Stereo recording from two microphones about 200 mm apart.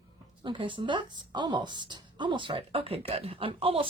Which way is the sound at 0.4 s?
25° right (ahead or behind).